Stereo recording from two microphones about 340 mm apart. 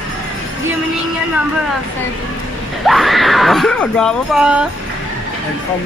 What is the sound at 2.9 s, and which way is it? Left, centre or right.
Speech, centre.